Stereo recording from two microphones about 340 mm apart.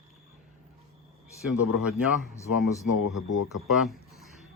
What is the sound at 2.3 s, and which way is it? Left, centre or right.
Speech, centre.